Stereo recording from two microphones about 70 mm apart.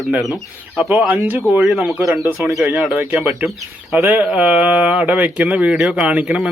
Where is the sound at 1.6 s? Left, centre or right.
Centre.